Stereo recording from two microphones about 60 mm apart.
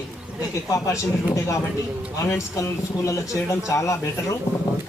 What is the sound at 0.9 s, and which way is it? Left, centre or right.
Speech, left.